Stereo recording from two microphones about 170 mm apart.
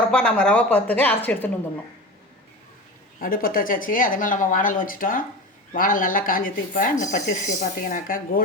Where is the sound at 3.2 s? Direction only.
60° left (ahead or behind).